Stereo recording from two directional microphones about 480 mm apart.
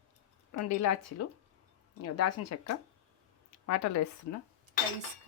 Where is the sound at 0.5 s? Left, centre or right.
Left.